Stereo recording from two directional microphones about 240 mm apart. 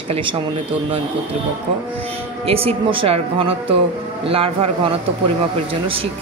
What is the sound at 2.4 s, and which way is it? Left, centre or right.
Speech, right.